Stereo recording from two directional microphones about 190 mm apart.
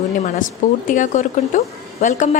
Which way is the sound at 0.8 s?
40° left (ahead or behind).